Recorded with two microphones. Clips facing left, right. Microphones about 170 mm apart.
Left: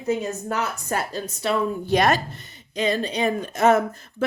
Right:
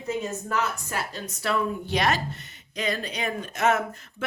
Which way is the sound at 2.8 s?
30° left (ahead or behind).